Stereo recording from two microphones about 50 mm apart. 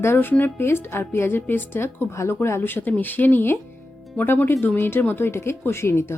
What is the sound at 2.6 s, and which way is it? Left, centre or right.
A woman's voice, left.